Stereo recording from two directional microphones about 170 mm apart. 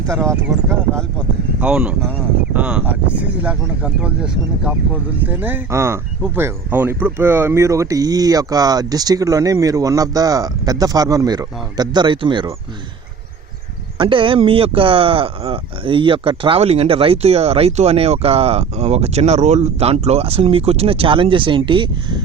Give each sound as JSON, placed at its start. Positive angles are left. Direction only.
{"t": 1.6, "sound": "speech", "side_deg": -5}
{"t": 14.0, "sound": "speech", "side_deg": -30}